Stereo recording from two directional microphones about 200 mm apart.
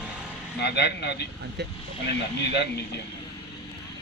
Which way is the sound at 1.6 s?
60° right (ahead or behind).